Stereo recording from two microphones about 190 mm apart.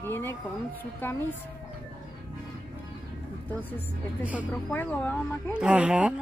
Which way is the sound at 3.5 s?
10° left (ahead or behind).